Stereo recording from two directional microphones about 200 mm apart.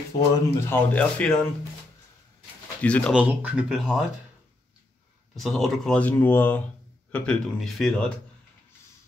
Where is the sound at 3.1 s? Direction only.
5° right (ahead or behind).